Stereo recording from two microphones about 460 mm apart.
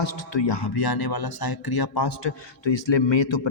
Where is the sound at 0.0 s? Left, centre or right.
Left.